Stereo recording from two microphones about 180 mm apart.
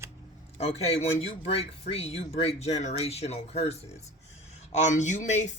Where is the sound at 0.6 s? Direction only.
35° left (ahead or behind).